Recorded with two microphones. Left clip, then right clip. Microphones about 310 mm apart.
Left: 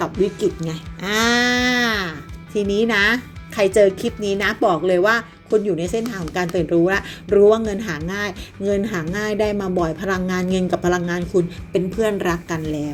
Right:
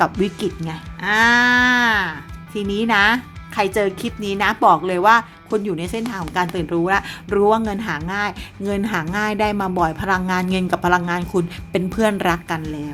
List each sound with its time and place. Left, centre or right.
0.3 s a woman's voice: centre
12.6 s a woman's voice: centre